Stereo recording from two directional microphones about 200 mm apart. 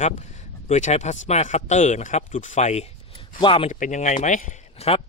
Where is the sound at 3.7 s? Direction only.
40° left (ahead or behind).